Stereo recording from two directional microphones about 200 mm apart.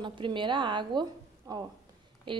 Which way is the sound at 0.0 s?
25° right (ahead or behind).